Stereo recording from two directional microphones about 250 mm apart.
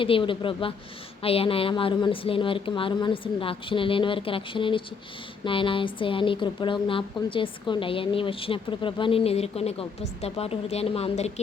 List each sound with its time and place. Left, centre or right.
0.0 s a woman's voice: left